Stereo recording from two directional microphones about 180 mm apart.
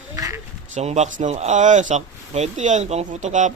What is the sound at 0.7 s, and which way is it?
Speech, 40° right (ahead or behind).